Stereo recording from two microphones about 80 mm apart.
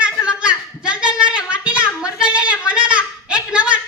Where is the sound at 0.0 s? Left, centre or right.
Centre.